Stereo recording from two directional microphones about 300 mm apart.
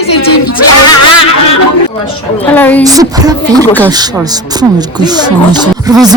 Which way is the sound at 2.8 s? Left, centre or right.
Centre.